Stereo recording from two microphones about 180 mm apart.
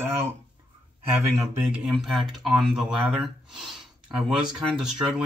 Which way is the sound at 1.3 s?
5° right (ahead or behind).